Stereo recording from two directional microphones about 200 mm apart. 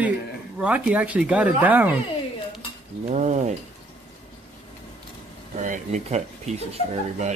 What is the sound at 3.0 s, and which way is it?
Speech, 35° right (ahead or behind).